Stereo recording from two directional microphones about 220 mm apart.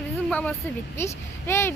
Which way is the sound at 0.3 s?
5° left (ahead or behind).